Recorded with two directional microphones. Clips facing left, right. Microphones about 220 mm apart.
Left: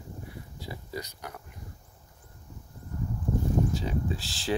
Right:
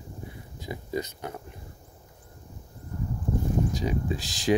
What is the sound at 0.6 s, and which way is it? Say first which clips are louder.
Speech: right 7 dB; 20° right (ahead or behind).